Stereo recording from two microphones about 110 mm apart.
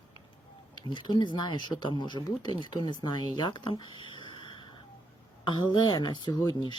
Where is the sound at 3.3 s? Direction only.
45° left (ahead or behind).